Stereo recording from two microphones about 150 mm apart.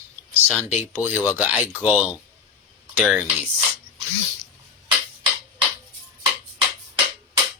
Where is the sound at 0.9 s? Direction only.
10° right (ahead or behind).